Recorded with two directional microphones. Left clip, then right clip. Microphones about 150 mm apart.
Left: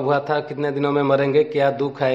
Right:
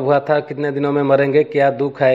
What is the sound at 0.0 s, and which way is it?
A man's voice, 25° right (ahead or behind).